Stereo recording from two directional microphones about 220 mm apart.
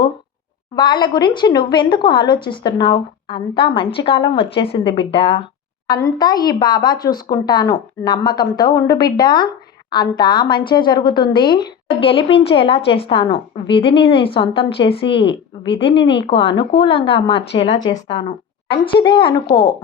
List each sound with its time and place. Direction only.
0.8 s a woman's voice: 20° left (ahead or behind)